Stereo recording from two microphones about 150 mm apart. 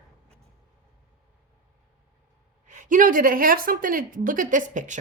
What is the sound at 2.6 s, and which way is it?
Speech, 60° right (ahead or behind).